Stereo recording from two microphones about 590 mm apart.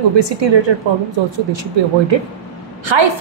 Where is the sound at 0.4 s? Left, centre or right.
Right.